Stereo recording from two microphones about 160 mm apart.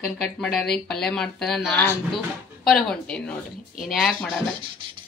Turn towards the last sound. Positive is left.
turn(degrees=0)  # may be behind; listen again after turning